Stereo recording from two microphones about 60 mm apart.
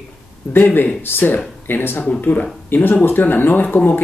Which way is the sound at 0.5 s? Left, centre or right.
Left.